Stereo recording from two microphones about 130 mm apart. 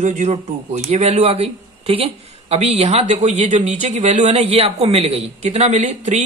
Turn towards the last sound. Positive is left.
turn(degrees=-60)  # may be behind; listen again after turning